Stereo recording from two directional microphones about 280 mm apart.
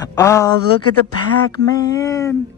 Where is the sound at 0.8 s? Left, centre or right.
Left.